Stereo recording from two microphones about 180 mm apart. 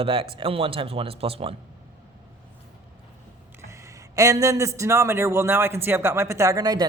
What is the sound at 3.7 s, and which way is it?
A man's voice, 15° right (ahead or behind).